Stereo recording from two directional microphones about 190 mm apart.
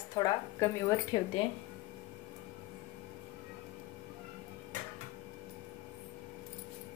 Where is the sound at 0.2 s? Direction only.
15° left (ahead or behind).